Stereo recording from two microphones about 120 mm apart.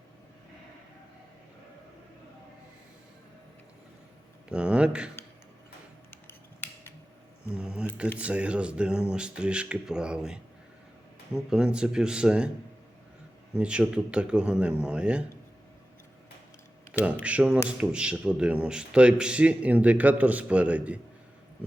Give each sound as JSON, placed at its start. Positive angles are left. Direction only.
{"t": 4.4, "sound": "speech", "side_deg": -10}
{"t": 6.1, "sound": "scissors", "side_deg": 20}
{"t": 7.5, "sound": "a sound", "side_deg": -5}
{"t": 8.2, "sound": "a man's voice", "side_deg": -10}
{"t": 11.4, "sound": "a man's voice", "side_deg": -5}
{"t": 13.6, "sound": "a man's voice", "side_deg": -10}
{"t": 17.0, "sound": "a man's voice", "side_deg": -10}